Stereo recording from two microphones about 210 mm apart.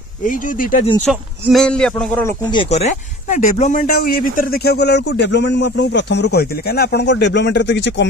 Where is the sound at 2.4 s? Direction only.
25° left (ahead or behind); by 8.1 s 55° left (ahead or behind).